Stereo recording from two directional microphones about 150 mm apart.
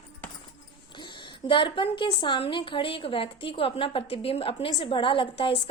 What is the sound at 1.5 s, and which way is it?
A woman's voice, 35° left (ahead or behind).